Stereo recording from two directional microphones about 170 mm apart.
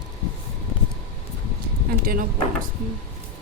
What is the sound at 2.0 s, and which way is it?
Speech, 55° right (ahead or behind).